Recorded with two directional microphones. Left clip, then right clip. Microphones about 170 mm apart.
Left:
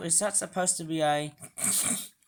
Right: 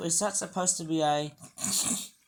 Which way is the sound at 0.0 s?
35° left (ahead or behind).